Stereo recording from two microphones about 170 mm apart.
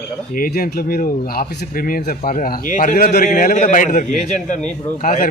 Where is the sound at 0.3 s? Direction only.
55° left (ahead or behind).